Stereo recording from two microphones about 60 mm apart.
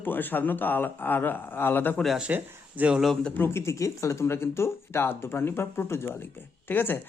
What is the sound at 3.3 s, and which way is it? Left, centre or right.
Speech, left.